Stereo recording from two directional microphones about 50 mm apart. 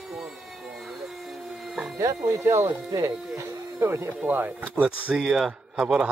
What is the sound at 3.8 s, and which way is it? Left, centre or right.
Speech, right.